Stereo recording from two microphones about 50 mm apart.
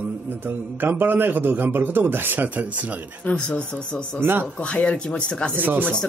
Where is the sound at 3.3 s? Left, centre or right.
Left.